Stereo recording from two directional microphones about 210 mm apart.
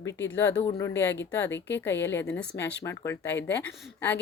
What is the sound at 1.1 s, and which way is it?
Speech, 55° left (ahead or behind).